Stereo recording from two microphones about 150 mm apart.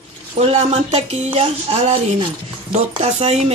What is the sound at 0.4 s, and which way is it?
Speech, 40° right (ahead or behind).